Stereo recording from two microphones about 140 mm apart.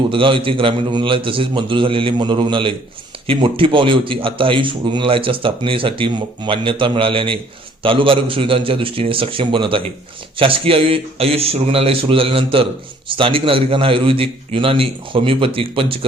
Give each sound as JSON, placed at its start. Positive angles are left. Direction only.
{"t": 0.1, "sound": "a man's voice", "side_deg": -35}